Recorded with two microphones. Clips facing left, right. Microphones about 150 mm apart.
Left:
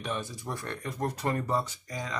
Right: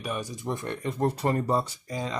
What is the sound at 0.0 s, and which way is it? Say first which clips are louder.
Speech: right 2 dB; 10° right (ahead or behind).